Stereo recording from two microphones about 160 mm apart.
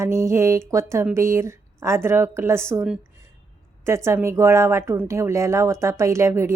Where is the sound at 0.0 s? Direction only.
15° right (ahead or behind).